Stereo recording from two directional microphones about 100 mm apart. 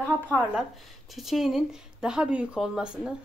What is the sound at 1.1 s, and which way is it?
A woman's voice, centre (ahead or behind).